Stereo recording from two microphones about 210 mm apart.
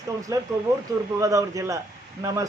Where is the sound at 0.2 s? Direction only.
15° right (ahead or behind).